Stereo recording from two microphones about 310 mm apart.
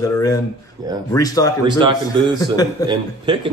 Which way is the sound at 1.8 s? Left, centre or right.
Centre.